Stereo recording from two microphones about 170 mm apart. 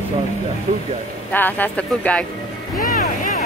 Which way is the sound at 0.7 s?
55° right (ahead or behind).